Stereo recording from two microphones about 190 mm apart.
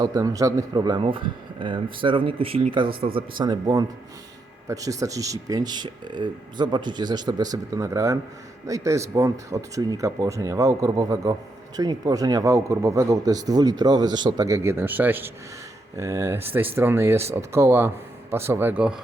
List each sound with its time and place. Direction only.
0.0 s speech: 20° right (ahead or behind)